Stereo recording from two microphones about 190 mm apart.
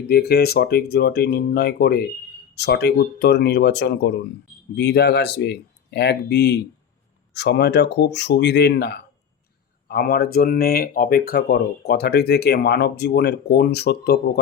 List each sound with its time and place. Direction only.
0.1 s speech: 55° left (ahead or behind)